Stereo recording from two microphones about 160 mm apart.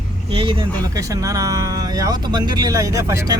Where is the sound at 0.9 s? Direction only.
20° right (ahead or behind).